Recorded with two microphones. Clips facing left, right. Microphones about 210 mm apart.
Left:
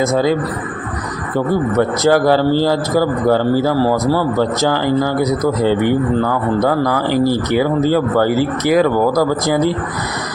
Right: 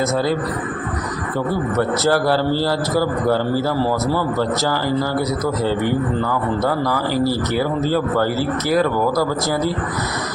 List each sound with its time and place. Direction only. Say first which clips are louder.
0.1 s a man's voice: left 4 dB; 15° left (ahead or behind)
2.0 s a man's voice: left 6 dB; 15° left (ahead or behind)
7.1 s a man's voice: left 5 dB; 15° left (ahead or behind)